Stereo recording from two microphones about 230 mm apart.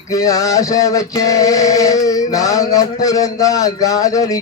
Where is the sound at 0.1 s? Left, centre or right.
Centre.